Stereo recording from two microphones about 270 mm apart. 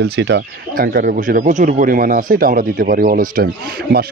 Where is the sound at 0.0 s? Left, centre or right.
Right.